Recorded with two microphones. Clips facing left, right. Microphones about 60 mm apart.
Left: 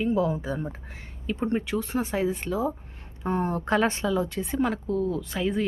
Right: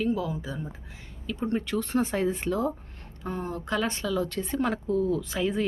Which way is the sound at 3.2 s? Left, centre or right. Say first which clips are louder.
Left 6 dB; left.